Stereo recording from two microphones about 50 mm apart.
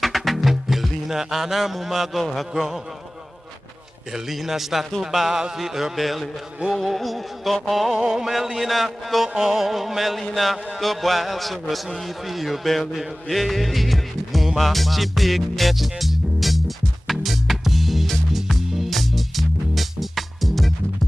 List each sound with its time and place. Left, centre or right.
0.0 s music: centre
4.1 s music: centre
7.9 s music: centre
10.8 s a man's voice: centre
17.1 s music: centre